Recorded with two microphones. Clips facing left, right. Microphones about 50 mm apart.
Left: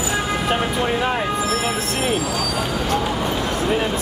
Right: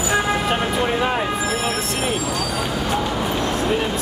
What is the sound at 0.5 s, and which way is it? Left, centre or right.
Vehicle, centre.